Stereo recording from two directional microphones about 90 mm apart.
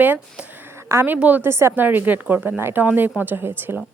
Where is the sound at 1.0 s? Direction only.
20° right (ahead or behind).